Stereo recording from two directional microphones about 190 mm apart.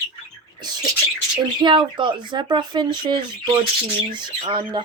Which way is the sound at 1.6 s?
25° right (ahead or behind).